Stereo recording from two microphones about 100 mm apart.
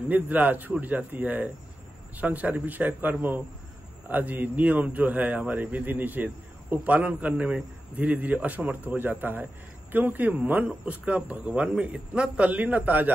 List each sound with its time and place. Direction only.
0.1 s a man's voice: 15° right (ahead or behind)